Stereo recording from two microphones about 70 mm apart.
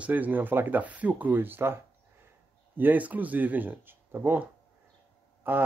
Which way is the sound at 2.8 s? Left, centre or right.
Right.